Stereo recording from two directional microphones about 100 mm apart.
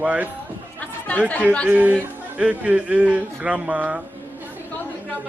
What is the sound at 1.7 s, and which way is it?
A man's voice, 15° right (ahead or behind).